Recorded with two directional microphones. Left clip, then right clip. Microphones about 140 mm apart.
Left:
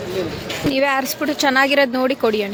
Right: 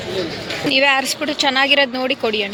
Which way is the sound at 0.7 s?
25° left (ahead or behind).